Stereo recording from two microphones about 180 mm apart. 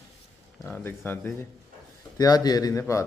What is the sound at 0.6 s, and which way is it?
A man's voice, 10° left (ahead or behind).